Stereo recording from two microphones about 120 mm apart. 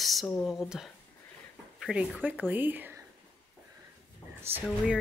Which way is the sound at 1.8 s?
5° right (ahead or behind).